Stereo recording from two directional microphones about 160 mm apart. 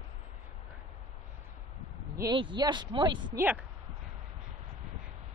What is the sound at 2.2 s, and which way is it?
Speech, 30° right (ahead or behind).